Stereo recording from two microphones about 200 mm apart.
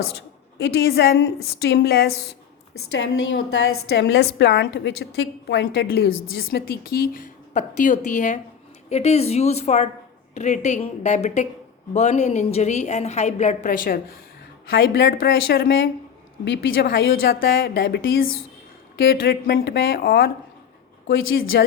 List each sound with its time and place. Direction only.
0.1 s a woman's voice: 55° left (ahead or behind)
2.7 s a woman's voice: 80° left; by 6.1 s 60° left (ahead or behind)
6.5 s a woman's voice: 50° left (ahead or behind)
21.5 s speech: 55° left (ahead or behind)